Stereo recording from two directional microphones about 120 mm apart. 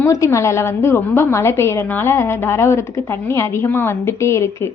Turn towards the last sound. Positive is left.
turn(degrees=25)  # may be behind; listen again after turning